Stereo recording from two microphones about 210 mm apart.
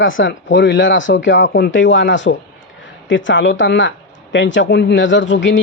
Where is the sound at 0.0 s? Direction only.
65° left (ahead or behind).